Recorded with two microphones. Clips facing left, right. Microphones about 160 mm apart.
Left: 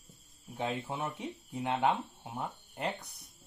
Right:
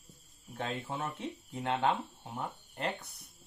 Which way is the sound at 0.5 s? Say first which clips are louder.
Left 2 dB; 15° left (ahead or behind).